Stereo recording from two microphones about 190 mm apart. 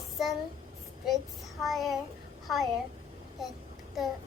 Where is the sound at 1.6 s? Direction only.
Centre (ahead or behind).